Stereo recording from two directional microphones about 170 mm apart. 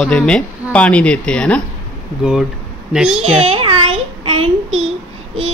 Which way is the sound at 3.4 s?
35° right (ahead or behind).